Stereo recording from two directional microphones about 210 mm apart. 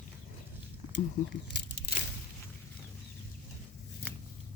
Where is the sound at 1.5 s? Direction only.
50° left (ahead or behind).